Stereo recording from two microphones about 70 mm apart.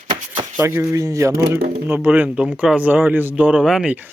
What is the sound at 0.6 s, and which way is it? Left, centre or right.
Speech, right.